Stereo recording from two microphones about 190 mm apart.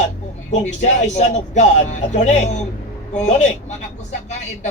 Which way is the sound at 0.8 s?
40° left (ahead or behind).